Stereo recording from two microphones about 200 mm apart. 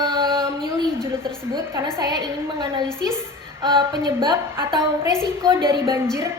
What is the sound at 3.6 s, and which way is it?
A woman's voice, 20° right (ahead or behind).